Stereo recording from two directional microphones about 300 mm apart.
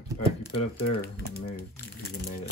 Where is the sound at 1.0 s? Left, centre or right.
Left.